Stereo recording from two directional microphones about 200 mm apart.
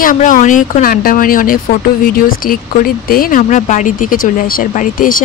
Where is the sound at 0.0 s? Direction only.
40° left (ahead or behind).